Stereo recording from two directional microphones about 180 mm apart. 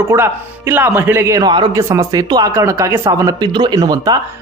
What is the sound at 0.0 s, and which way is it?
Speech, 15° right (ahead or behind).